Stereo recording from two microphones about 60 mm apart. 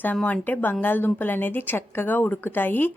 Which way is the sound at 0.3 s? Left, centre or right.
Left.